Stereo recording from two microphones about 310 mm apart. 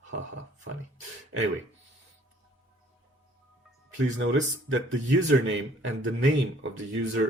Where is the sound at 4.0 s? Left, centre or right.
Right.